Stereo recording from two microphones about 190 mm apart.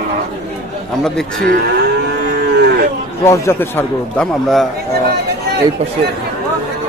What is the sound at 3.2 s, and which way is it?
A man's voice, 15° left (ahead or behind).